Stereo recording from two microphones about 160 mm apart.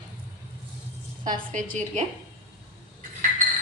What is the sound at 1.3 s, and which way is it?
Speech, 55° right (ahead or behind).